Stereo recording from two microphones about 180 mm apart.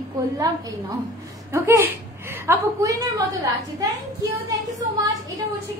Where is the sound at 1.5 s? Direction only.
15° right (ahead or behind).